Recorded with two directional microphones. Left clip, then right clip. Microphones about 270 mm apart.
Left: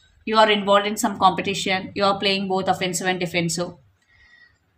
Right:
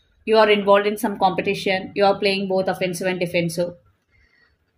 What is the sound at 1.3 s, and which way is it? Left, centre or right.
Speech, centre.